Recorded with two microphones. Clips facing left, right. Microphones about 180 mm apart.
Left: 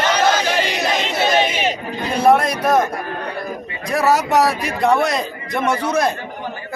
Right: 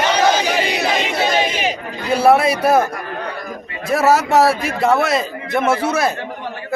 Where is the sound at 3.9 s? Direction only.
Centre (ahead or behind).